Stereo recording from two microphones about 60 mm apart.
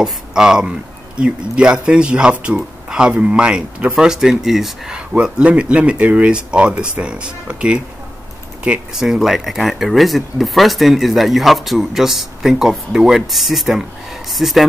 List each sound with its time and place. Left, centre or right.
0.0 s speech: centre
8.9 s speech: centre